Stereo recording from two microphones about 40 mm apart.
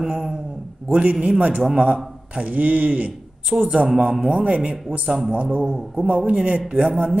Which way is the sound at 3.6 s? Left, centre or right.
Centre.